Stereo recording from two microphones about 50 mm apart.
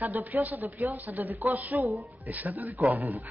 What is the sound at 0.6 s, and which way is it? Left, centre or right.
Speech, right.